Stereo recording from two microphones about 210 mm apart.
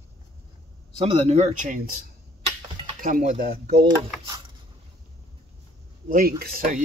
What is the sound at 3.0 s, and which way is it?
Speech, 40° right (ahead or behind).